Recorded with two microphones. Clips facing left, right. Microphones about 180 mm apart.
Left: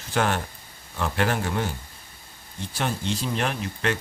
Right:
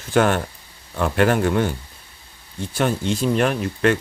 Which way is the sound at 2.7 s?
50° right (ahead or behind).